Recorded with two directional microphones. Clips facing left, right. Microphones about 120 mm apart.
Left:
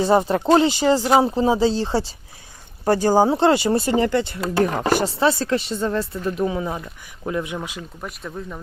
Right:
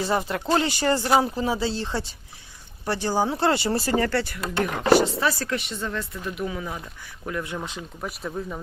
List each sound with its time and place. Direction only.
0.0 s speech: 25° left (ahead or behind)
1.2 s speech: 25° left (ahead or behind)
2.8 s speech: 45° left (ahead or behind)
3.4 s speech: 20° left (ahead or behind)
7.8 s speech: 5° right (ahead or behind)